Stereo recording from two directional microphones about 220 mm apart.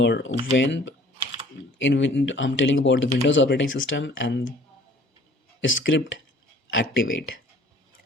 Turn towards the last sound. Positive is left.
turn(degrees=60)  # may be behind; listen again after turning